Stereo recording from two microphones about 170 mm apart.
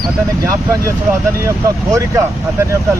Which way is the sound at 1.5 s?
20° right (ahead or behind).